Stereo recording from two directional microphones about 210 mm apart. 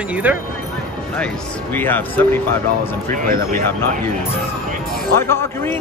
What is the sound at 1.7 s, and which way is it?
Speech, 10° left (ahead or behind).